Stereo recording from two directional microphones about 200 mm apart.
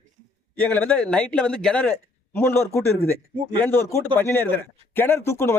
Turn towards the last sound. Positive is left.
turn(degrees=10)  # may be behind; listen again after turning